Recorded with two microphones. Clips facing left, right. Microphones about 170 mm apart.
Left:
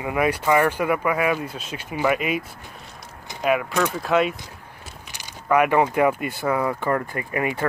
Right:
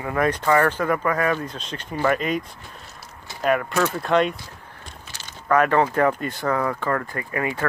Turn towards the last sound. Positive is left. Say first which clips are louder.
# left 1 dB
turn(degrees=20)  # may be behind; listen again after turning